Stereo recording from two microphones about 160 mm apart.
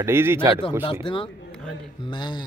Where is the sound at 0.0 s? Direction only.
15° right (ahead or behind).